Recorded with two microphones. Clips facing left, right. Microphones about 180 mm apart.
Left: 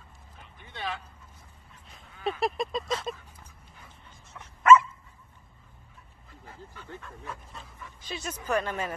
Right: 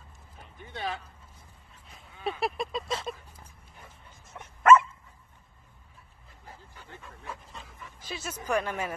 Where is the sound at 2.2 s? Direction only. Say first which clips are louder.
Left 2 dB; 10° right (ahead or behind).